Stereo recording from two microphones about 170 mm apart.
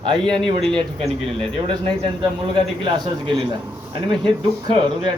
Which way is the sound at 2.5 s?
25° right (ahead or behind).